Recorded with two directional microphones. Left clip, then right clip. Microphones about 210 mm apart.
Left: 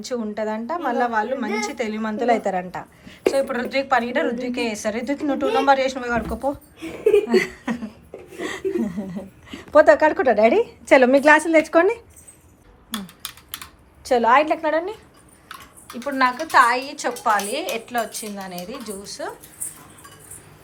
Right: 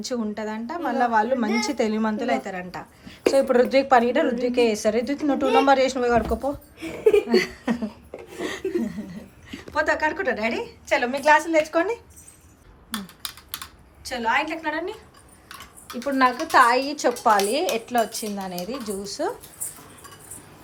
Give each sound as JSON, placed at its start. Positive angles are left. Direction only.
{"t": 0.0, "sound": "a woman's voice", "side_deg": -10}
{"t": 2.1, "sound": "a woman's voice", "side_deg": 0}
{"t": 3.3, "sound": "a woman's voice", "side_deg": -20}
{"t": 8.4, "sound": "a sound", "side_deg": -5}
{"t": 9.5, "sound": "speech", "side_deg": 10}
{"t": 10.8, "sound": "a woman's voice", "side_deg": 30}
{"t": 14.0, "sound": "a woman's voice", "side_deg": 15}
{"t": 14.7, "sound": "speech", "side_deg": 0}
{"t": 16.0, "sound": "a woman's voice", "side_deg": -15}